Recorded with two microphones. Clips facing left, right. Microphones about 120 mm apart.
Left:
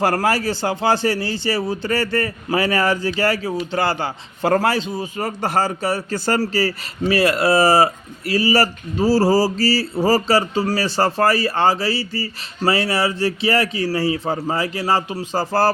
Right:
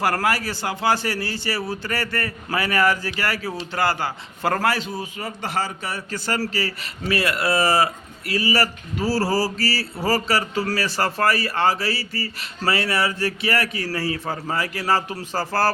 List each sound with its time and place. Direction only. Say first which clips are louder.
0.0 s speech: left 4 dB; 30° left (ahead or behind)
5.1 s speech: left 7 dB; 45° left (ahead or behind); by 15.7 s 20° left (ahead or behind)